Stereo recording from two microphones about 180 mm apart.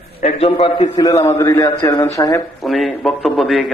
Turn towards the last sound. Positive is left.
turn(degrees=0)  # may be behind; listen again after turning